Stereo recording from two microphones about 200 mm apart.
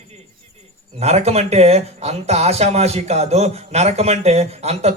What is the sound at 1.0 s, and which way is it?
Speech, 30° right (ahead or behind).